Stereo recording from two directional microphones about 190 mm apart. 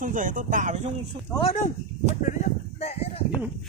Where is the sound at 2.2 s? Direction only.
35° left (ahead or behind).